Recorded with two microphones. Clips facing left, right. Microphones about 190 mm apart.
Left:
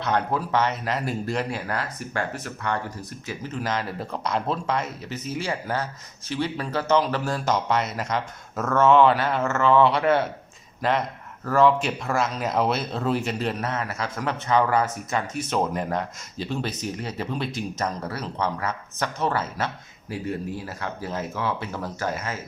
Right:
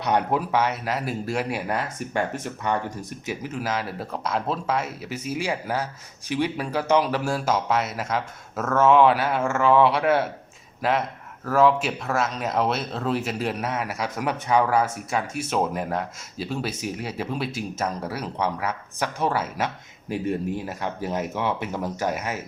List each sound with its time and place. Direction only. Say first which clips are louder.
0.0 s speech: right 2 dB; 15° right (ahead or behind)
1.5 s speech: right 2 dB; 15° right (ahead or behind)
3.2 s speech: right 1 dB; 10° right (ahead or behind)